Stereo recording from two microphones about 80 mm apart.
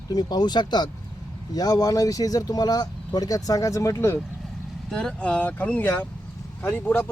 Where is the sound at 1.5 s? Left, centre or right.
Left.